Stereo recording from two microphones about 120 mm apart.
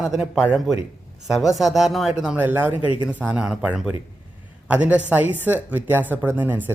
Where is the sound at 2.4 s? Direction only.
15° right (ahead or behind).